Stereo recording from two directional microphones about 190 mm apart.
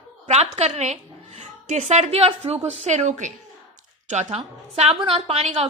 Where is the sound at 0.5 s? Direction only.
35° right (ahead or behind).